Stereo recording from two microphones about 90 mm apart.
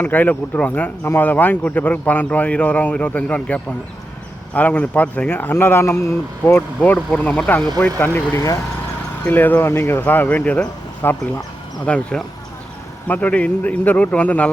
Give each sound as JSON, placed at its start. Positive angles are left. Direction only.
{"t": 0.0, "sound": "speech", "side_deg": 20}
{"t": 6.8, "sound": "speech", "side_deg": 15}